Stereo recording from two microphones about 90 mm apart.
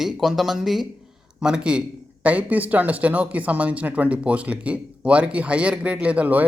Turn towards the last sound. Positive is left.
turn(degrees=-15)  # may be behind; listen again after turning